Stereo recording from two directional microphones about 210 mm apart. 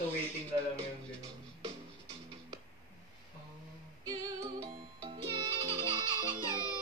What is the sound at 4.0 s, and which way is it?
Music, 15° right (ahead or behind).